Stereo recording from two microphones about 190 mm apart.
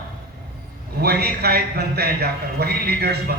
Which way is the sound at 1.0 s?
55° right (ahead or behind).